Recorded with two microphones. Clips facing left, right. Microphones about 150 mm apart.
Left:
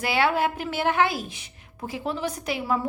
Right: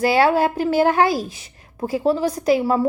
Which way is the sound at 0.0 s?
40° right (ahead or behind).